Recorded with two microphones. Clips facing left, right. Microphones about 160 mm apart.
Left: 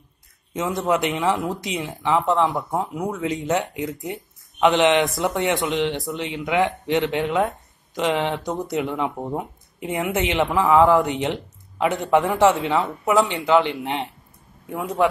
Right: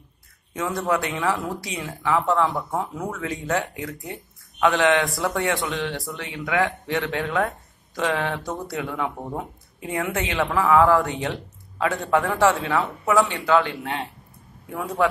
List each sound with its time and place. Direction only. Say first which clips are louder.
0.5 s speech: left 2 dB; 20° left (ahead or behind)